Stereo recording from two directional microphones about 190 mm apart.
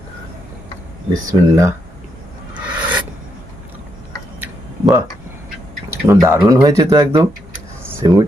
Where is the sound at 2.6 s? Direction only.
10° right (ahead or behind).